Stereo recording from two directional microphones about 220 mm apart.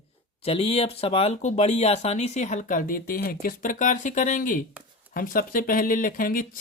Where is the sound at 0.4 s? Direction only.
25° left (ahead or behind).